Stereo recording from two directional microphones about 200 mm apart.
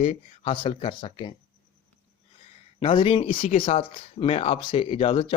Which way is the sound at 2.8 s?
25° left (ahead or behind).